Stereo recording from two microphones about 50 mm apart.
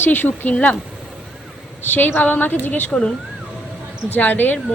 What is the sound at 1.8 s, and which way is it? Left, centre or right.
A woman's voice, left.